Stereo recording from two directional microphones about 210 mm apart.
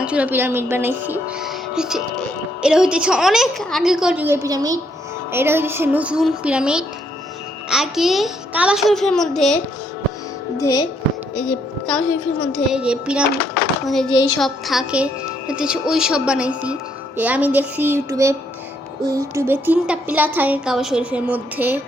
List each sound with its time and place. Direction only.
0.0 s a woman's voice: 5° right (ahead or behind)
4.4 s a woman's voice: 15° right (ahead or behind); by 9.6 s centre (ahead or behind)
10.6 s speech: 15° left (ahead or behind)
11.3 s a woman's voice: 5° left (ahead or behind)
13.6 s a sound: centre (ahead or behind)
14.1 s speech: 20° left (ahead or behind)
14.3 s a woman's voice: centre (ahead or behind)